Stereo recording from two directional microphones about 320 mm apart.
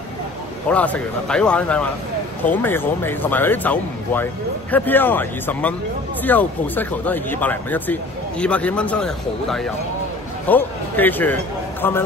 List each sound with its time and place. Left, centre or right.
0.7 s speech: centre